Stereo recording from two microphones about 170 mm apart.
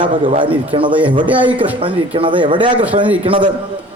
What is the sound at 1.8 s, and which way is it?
A man's voice, 30° right (ahead or behind).